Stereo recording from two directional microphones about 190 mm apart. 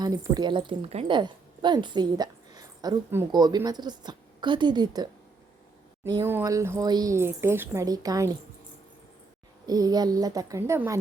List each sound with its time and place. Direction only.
0.0 s a woman's voice: 20° right (ahead or behind)
6.1 s speech: 15° right (ahead or behind)
9.6 s a woman's voice: 20° right (ahead or behind)